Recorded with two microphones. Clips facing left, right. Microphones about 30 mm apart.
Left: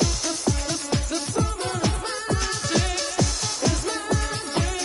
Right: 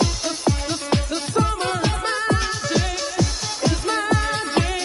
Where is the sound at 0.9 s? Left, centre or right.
Right.